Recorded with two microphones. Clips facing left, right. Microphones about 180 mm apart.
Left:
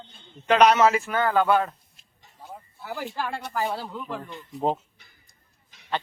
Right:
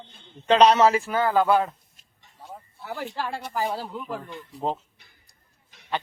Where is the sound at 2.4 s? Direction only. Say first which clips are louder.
Even; centre (ahead or behind).